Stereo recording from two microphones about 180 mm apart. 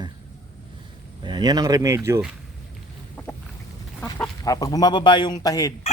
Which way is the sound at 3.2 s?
5° left (ahead or behind).